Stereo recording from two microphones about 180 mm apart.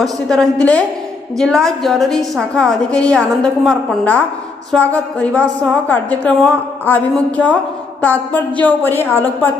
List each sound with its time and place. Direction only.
0.0 s a woman's voice: centre (ahead or behind)